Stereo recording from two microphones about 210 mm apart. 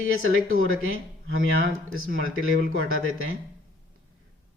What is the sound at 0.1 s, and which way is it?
Speech, 75° right (ahead or behind).